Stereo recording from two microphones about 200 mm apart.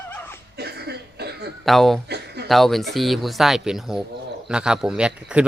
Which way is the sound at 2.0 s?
55° right (ahead or behind).